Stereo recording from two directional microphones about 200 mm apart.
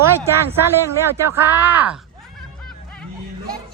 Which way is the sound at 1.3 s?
10° right (ahead or behind).